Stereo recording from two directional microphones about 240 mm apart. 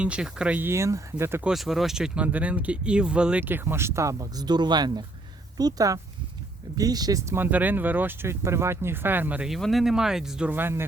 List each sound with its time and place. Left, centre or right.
0.0 s speech: centre